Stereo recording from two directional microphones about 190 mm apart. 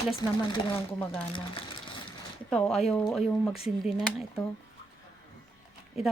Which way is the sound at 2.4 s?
5° left (ahead or behind).